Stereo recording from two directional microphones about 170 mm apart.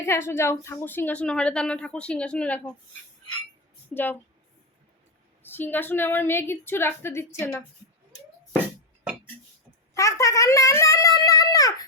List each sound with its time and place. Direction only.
0.0 s a woman's voice: 15° left (ahead or behind)
3.9 s a woman's voice: 10° left (ahead or behind)
5.4 s a woman's voice: 10° left (ahead or behind)
9.9 s a sound: 20° left (ahead or behind)